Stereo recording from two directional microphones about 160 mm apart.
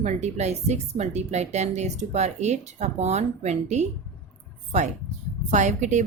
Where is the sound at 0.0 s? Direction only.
45° right (ahead or behind).